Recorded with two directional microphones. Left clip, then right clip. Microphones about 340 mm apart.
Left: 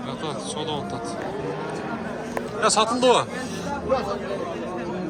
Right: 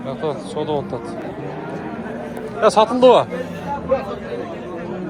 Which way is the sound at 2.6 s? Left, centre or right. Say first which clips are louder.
Right 7 dB; centre.